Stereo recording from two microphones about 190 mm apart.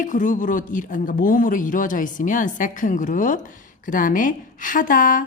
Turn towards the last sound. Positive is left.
turn(degrees=45)  # may be behind; listen again after turning